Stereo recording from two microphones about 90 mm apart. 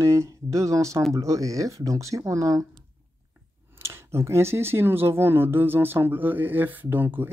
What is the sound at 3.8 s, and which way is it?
Speech, 30° right (ahead or behind).